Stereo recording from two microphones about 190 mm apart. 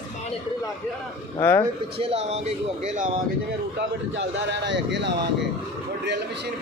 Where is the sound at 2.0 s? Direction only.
35° right (ahead or behind).